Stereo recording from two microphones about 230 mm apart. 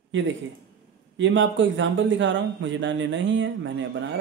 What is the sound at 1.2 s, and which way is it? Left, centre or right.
A man's voice, right.